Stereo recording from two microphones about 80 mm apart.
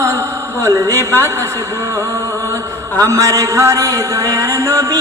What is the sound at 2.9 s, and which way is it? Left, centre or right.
A man's voice, right.